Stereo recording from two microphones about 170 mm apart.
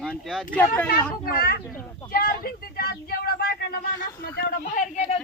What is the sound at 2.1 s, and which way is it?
Speech, 65° left (ahead or behind).